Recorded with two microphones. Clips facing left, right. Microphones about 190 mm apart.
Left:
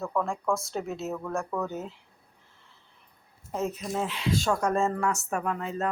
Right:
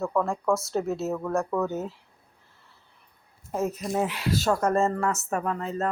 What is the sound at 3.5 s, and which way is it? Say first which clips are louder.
Speech: right 3 dB; 10° right (ahead or behind).